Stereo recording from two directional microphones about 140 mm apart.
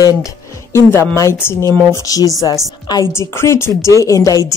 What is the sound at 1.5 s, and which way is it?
Speech, 25° right (ahead or behind).